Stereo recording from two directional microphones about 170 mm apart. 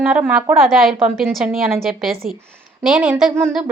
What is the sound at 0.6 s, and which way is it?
A woman's voice, centre (ahead or behind).